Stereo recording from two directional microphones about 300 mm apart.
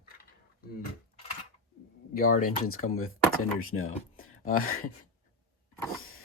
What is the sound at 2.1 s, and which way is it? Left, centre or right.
Speech, left.